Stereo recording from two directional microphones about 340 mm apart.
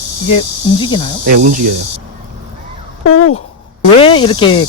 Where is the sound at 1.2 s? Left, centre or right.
Right.